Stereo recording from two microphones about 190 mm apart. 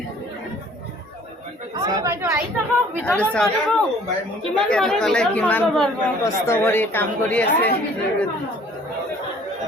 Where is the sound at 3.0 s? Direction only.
5° left (ahead or behind).